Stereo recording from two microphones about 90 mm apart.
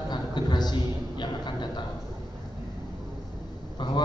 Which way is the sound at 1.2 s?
55° left (ahead or behind).